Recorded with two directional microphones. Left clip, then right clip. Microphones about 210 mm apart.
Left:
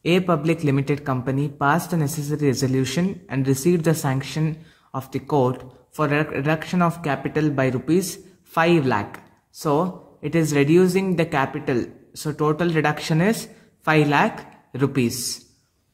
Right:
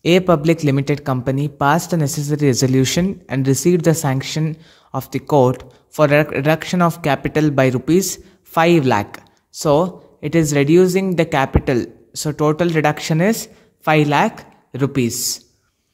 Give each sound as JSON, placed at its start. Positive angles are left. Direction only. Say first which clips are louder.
{"t": 0.0, "sound": "speech", "louder": "right 6 dB", "side_deg": -35}